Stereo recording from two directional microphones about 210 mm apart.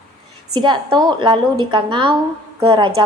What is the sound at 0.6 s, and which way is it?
A woman's voice, 20° right (ahead or behind).